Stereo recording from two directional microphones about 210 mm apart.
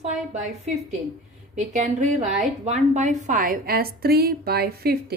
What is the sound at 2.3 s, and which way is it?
A woman's voice, 35° right (ahead or behind).